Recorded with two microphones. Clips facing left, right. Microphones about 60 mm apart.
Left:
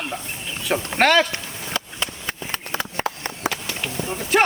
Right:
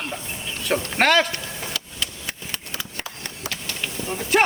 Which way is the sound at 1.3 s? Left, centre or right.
Left.